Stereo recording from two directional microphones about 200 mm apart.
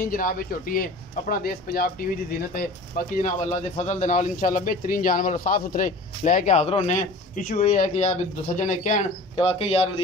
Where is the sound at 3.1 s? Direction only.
35° left (ahead or behind).